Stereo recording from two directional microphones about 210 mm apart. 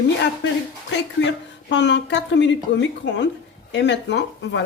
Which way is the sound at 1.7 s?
60° left (ahead or behind).